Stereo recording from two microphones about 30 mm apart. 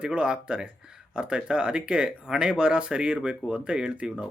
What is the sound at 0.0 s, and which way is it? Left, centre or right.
Speech, right.